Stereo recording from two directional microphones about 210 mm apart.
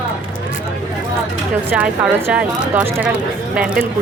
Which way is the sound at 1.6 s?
5° right (ahead or behind).